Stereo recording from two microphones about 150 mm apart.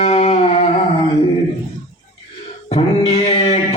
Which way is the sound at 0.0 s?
45° left (ahead or behind).